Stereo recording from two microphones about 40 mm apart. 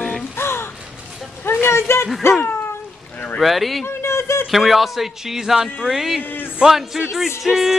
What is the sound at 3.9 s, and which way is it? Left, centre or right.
Speech, left.